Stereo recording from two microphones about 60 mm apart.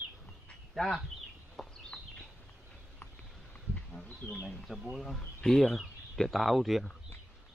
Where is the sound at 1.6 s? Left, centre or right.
Centre.